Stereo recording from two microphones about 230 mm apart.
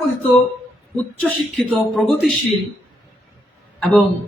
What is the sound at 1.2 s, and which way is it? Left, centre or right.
A man's voice, centre.